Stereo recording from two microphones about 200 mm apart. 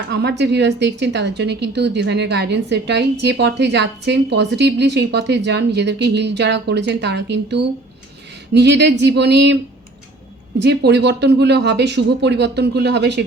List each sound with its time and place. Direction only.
0.1 s a woman's voice: 55° right (ahead or behind)
10.6 s a woman's voice: 60° right (ahead or behind)